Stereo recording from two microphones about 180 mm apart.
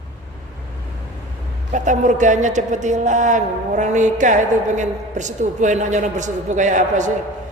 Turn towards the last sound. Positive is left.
turn(degrees=-45)  # may be behind; listen again after turning